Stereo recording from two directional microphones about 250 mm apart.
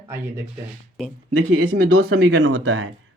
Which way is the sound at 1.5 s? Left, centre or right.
Right.